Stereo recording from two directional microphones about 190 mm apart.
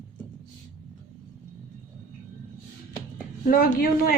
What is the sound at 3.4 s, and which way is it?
Speech, 50° left (ahead or behind).